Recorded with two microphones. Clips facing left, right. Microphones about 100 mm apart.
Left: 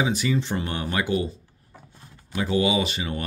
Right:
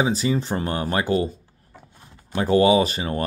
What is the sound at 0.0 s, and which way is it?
Speech, 35° right (ahead or behind).